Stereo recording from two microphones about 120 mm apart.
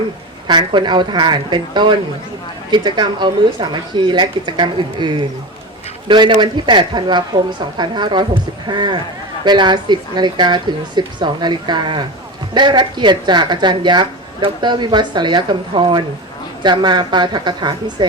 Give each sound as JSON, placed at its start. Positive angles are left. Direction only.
{"t": 0.4, "sound": "speech", "side_deg": -40}